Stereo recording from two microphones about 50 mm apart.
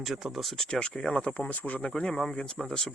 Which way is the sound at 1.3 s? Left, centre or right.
Left.